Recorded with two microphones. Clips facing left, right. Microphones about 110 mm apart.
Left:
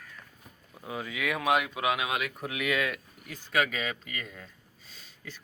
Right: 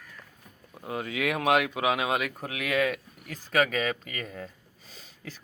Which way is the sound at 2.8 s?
45° right (ahead or behind).